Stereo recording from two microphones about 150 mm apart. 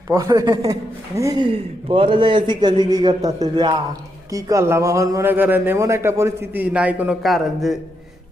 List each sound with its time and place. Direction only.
0.1 s a man's voice: 20° right (ahead or behind)
1.5 s a man's voice: 35° right (ahead or behind); by 7.8 s centre (ahead or behind)